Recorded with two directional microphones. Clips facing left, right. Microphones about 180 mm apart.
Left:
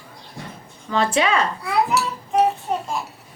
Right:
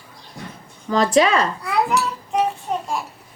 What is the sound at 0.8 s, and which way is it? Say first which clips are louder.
Speech: right 4 dB; 40° right (ahead or behind).